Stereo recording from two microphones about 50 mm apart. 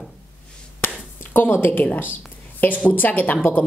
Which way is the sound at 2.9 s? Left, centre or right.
Left.